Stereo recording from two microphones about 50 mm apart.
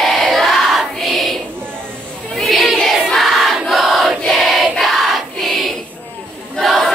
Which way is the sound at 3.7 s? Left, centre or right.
Centre.